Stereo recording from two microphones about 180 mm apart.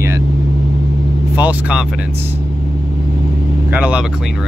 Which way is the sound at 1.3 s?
10° right (ahead or behind).